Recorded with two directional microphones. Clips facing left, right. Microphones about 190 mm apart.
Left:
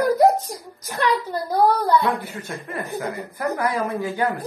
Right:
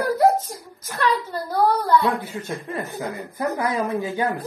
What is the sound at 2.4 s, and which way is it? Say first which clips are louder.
A man's voice: right 2 dB; 20° right (ahead or behind).